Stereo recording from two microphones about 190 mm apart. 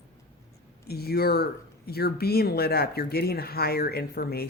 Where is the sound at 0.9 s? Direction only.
55° left (ahead or behind).